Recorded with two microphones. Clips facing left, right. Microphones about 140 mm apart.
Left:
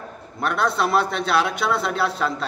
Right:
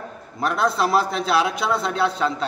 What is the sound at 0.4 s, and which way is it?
A man's voice, centre (ahead or behind).